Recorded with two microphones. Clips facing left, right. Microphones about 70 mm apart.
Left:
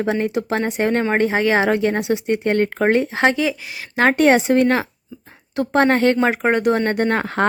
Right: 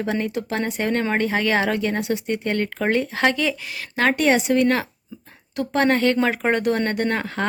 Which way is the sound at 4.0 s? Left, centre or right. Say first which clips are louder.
Left 4 dB; left.